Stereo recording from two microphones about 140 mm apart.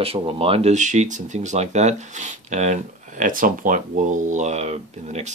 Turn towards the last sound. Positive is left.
turn(degrees=-55)  # may be behind; listen again after turning